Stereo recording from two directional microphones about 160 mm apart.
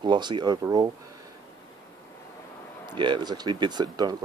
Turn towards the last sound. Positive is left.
turn(degrees=-25)  # may be behind; listen again after turning